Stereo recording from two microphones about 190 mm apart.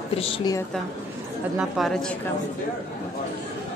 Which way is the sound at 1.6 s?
Centre (ahead or behind).